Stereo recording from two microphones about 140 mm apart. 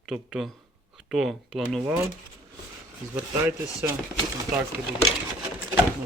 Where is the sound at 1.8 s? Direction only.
15° right (ahead or behind).